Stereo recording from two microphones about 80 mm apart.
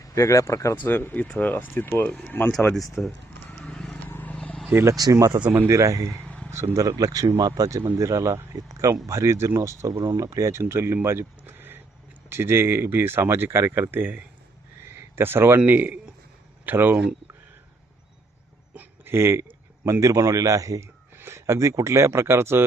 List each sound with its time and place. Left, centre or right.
0.0 s speech: left
0.9 s speech: left
2.7 s speech: centre
3.5 s horse: centre
4.1 s vehicle: left
4.4 s vehicle: centre
4.7 s speech: right
6.2 s a sound: centre
6.5 s speech: right
6.8 s speech: right
7.8 s speech: right
18.7 s speech: right
21.2 s speech: right